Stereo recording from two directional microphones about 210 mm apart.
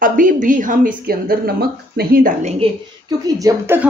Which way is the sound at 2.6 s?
20° right (ahead or behind).